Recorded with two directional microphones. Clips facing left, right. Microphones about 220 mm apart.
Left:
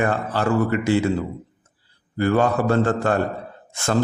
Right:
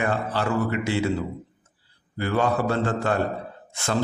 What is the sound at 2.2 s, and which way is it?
Speech, 50° left (ahead or behind).